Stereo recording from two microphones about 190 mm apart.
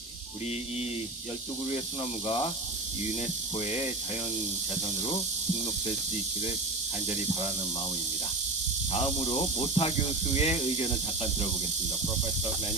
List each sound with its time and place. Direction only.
2.2 s speech: 30° left (ahead or behind)
3.6 s speech: 35° left (ahead or behind)
8.9 s speech: 30° left (ahead or behind)